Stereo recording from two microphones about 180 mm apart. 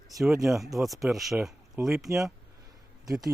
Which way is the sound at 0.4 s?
Centre (ahead or behind).